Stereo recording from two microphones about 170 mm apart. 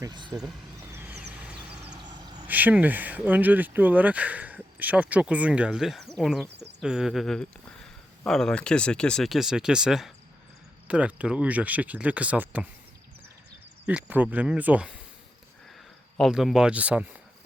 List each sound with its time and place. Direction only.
0.0 s speech: 25° right (ahead or behind)
0.9 s vehicle: 10° right (ahead or behind)
2.0 s a sound: 25° right (ahead or behind)
2.5 s speech: 10° right (ahead or behind)
13.8 s speech: 10° right (ahead or behind)
16.1 s speech: centre (ahead or behind)